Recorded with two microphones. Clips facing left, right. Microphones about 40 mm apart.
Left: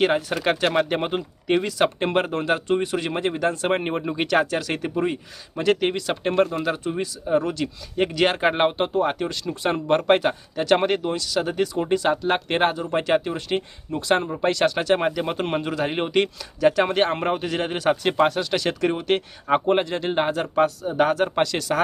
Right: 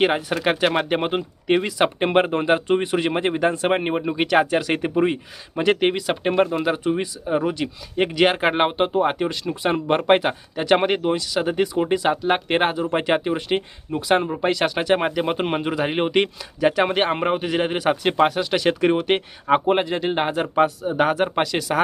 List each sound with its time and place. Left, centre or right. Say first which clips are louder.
0.0 s speech: right 1 dB; centre